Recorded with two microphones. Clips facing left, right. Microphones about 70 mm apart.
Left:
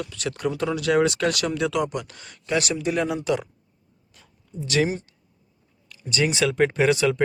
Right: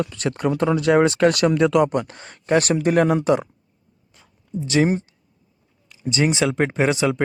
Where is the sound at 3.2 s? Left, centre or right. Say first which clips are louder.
Right 5 dB; right.